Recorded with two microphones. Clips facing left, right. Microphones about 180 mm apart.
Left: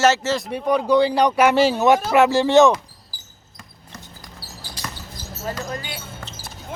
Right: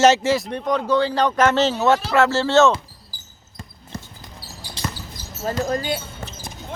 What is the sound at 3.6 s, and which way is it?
Basketball bounce, 25° right (ahead or behind).